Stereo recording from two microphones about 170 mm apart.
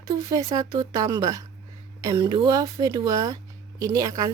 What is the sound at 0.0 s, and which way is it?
Speech, 20° right (ahead or behind).